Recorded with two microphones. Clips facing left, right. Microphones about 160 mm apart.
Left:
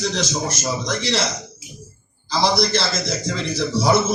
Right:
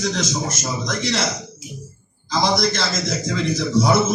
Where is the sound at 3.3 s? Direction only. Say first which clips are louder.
Right 5 dB; 30° left (ahead or behind).